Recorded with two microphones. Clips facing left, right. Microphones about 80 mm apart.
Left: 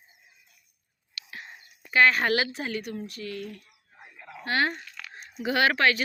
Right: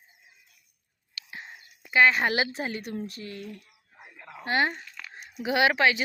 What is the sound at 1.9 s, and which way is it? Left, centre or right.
Speech, centre.